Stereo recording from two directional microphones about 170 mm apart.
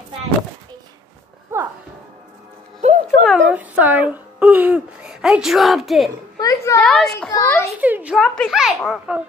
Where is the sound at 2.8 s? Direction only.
40° right (ahead or behind).